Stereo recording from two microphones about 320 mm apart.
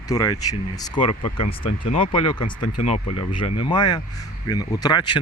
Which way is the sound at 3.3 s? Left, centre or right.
Left.